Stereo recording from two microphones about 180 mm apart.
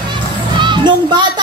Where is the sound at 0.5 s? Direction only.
25° right (ahead or behind).